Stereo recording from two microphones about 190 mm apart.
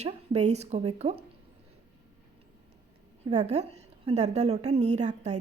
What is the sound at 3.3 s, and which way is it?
A woman's voice, 35° right (ahead or behind).